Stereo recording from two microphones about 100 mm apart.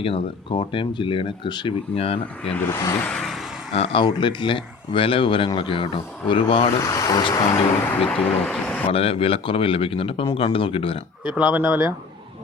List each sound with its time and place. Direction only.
0.0 s speech: 60° left (ahead or behind)
2.0 s speech: 70° left (ahead or behind)
2.6 s speech: 30° left (ahead or behind)
3.0 s a sound: 5° left (ahead or behind)
3.8 s speech: 75° left (ahead or behind)
4.0 s speech: 50° left (ahead or behind)
6.7 s speech: 35° left (ahead or behind)
8.0 s speech: 10° left (ahead or behind)
8.9 s speech: 70° left (ahead or behind)
11.3 s speech: 10° right (ahead or behind)